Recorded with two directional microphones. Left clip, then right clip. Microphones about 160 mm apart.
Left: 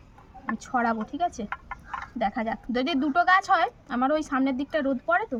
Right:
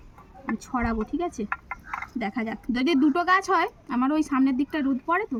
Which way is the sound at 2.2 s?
20° left (ahead or behind).